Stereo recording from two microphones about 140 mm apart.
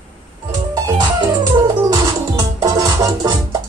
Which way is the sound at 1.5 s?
25° right (ahead or behind).